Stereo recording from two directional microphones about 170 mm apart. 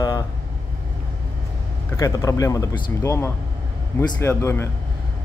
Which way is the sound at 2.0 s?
20° left (ahead or behind).